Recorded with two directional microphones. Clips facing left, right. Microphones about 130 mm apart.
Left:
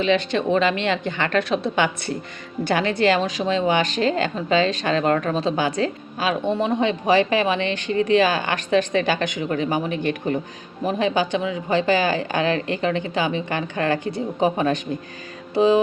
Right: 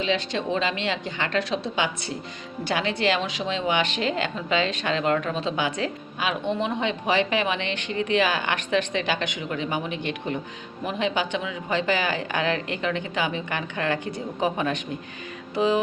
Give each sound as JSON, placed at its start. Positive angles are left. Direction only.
{"t": 0.0, "sound": "a woman's voice", "side_deg": 60}
{"t": 15.5, "sound": "music", "side_deg": 30}